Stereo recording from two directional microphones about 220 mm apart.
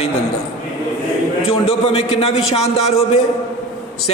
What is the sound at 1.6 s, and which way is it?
A man's voice, 25° left (ahead or behind).